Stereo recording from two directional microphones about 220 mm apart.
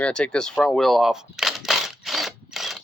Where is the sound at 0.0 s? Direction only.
5° left (ahead or behind).